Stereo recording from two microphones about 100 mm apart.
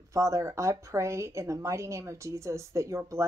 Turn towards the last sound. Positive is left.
turn(degrees=-30)  # may be behind; listen again after turning